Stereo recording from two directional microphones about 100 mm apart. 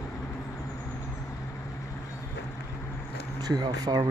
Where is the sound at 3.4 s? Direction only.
40° right (ahead or behind).